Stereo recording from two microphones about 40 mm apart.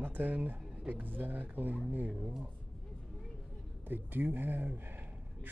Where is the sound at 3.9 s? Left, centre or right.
Right.